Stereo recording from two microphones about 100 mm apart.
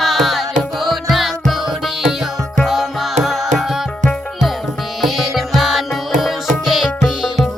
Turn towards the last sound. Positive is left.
turn(degrees=0)  # may be behind; listen again after turning